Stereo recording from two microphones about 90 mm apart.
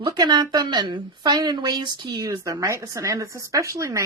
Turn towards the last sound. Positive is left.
turn(degrees=-35)  # may be behind; listen again after turning